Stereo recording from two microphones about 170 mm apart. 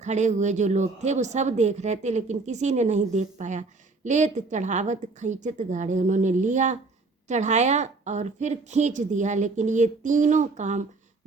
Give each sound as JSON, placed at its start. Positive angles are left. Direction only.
{"t": 0.0, "sound": "a woman's voice", "side_deg": -45}